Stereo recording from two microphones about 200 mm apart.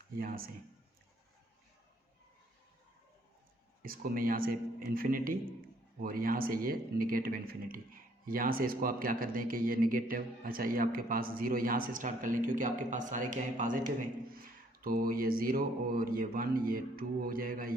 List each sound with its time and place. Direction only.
0.2 s speech: 45° right (ahead or behind)
3.8 s speech: 45° right (ahead or behind)